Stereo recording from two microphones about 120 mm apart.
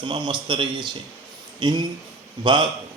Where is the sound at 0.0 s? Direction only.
45° right (ahead or behind).